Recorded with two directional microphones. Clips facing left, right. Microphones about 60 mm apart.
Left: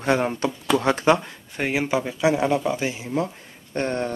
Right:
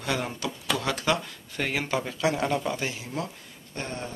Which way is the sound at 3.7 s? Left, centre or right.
Left.